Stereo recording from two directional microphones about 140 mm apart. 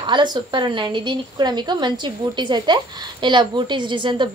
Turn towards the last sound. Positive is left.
turn(degrees=-35)  # may be behind; listen again after turning